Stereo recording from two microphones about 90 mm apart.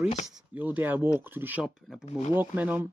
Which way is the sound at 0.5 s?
20° right (ahead or behind).